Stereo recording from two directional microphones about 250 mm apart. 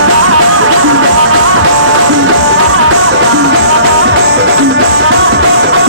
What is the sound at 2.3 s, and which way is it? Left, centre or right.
Music, right.